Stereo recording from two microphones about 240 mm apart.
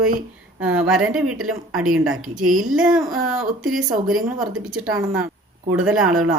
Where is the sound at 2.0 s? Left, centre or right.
Right.